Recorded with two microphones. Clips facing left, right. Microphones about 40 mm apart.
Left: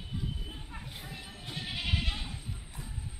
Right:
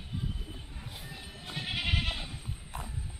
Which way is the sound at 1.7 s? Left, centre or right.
Right.